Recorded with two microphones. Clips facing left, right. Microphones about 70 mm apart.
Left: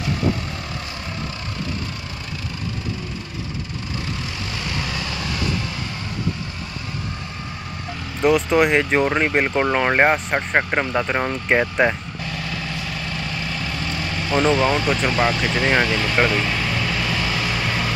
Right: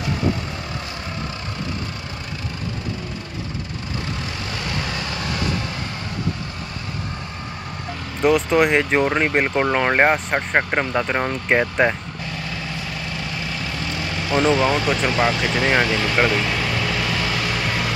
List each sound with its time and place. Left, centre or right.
5.1 s vehicle: right
8.2 s speech: centre
13.9 s speech: centre
17.1 s vehicle: centre